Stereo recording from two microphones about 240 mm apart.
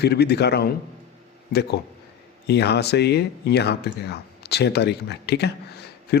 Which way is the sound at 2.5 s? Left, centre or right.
Left.